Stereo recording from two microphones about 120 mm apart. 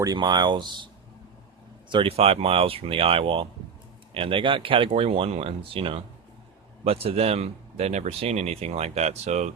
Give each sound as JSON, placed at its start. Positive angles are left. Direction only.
{"t": 0.0, "sound": "speech", "side_deg": -35}
{"t": 1.9, "sound": "speech", "side_deg": -50}